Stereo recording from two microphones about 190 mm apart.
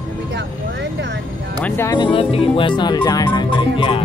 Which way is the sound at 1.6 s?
10° left (ahead or behind).